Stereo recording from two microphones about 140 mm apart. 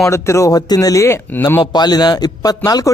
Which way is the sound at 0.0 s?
20° left (ahead or behind).